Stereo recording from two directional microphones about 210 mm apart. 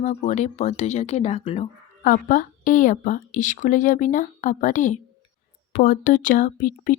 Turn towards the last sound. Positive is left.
turn(degrees=40)  # may be behind; listen again after turning